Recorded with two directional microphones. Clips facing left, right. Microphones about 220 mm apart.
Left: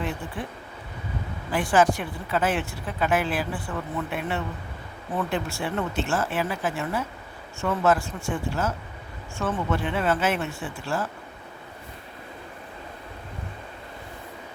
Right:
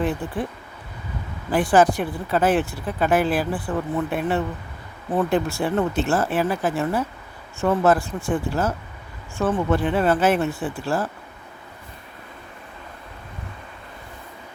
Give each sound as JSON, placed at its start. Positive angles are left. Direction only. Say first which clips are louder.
{"t": 1.5, "sound": "speech", "louder": "right 4 dB", "side_deg": -35}